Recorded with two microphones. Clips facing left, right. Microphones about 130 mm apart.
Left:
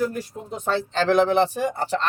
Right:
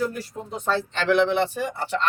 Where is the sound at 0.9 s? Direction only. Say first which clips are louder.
Left 3 dB; 40° left (ahead or behind).